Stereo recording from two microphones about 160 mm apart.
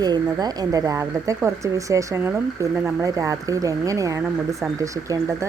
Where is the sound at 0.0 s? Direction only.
25° right (ahead or behind).